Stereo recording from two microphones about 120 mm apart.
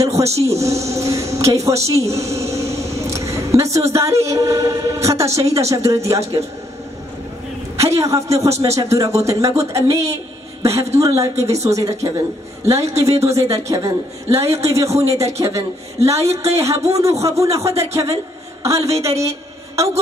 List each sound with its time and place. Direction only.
0.4 s a woman's voice: 25° right (ahead or behind)
7.7 s a woman's voice: 25° right (ahead or behind)